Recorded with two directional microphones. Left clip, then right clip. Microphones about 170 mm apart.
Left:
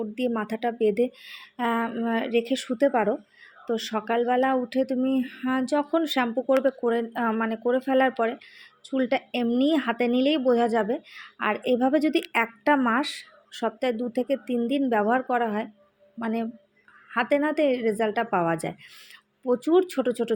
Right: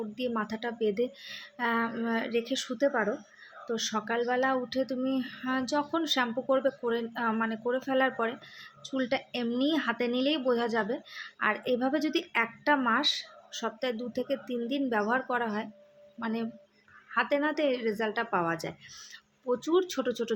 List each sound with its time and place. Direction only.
0.2 s speech: 25° left (ahead or behind)
12.3 s speech: 35° left (ahead or behind)